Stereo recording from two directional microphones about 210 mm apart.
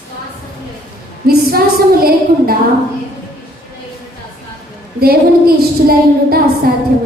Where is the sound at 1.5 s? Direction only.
45° right (ahead or behind).